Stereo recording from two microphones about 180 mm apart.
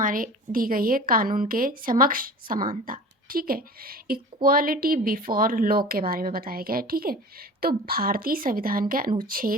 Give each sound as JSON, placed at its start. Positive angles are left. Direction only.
{"t": 0.0, "sound": "a woman's voice", "side_deg": -50}